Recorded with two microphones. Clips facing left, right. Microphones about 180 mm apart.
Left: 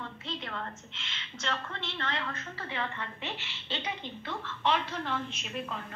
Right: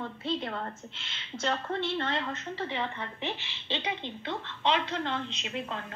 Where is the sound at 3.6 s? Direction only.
15° right (ahead or behind).